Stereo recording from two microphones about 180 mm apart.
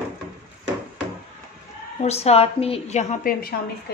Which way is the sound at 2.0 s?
35° left (ahead or behind).